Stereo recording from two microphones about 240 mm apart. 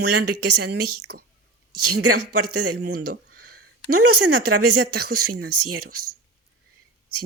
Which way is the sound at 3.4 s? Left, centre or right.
Right.